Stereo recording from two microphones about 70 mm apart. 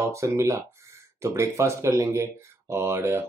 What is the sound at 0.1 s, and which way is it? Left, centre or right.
Speech, right.